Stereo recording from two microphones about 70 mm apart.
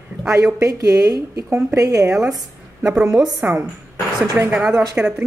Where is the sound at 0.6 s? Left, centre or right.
Right.